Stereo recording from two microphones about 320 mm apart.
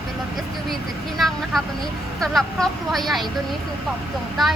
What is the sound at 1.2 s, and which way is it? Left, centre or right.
A woman's voice, centre.